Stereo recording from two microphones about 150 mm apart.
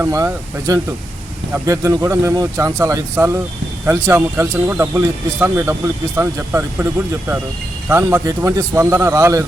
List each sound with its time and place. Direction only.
0.0 s speech: 15° right (ahead or behind)
7.9 s speech: 15° right (ahead or behind)